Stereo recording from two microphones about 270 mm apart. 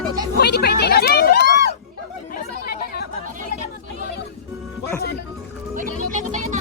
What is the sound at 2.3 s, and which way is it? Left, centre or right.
Chatter, left.